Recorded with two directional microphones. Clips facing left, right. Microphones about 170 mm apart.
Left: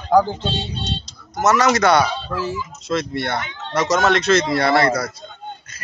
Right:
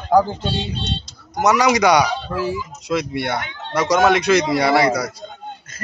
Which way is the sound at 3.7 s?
10° right (ahead or behind).